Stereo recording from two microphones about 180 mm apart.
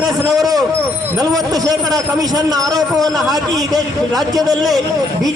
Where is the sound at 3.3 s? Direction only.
20° right (ahead or behind).